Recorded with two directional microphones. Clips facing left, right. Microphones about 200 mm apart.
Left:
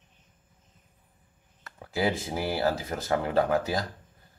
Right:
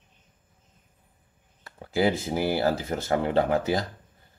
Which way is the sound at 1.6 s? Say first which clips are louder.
Right 4 dB; 25° right (ahead or behind).